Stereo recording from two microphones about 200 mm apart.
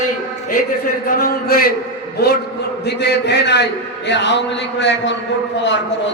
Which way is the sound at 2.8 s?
55° left (ahead or behind).